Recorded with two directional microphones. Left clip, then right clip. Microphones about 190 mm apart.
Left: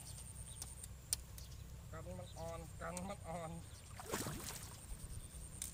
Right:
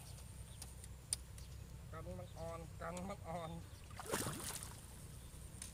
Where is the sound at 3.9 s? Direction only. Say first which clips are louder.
Right 2 dB; 25° right (ahead or behind).